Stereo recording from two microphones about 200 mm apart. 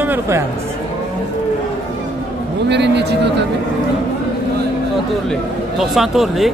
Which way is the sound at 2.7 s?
60° right (ahead or behind).